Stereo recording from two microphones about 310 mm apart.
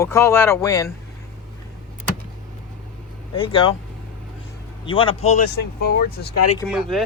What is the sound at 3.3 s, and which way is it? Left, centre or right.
Speech, centre.